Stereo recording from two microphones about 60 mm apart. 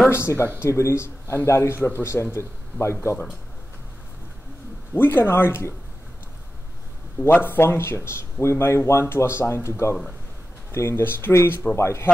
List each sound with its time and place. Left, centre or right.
0.1 s speech: left
4.9 s speech: left
7.2 s speech: left
11.7 s speech: left